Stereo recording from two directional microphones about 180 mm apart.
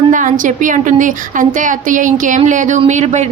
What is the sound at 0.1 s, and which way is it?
A woman's voice, 45° right (ahead or behind).